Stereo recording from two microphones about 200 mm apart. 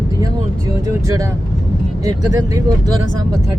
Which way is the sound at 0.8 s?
15° right (ahead or behind).